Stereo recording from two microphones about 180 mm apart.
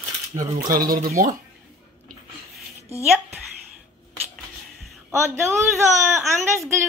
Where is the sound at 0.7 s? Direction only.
50° right (ahead or behind).